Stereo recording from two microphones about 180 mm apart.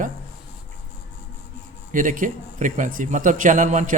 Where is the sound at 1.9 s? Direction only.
45° right (ahead or behind).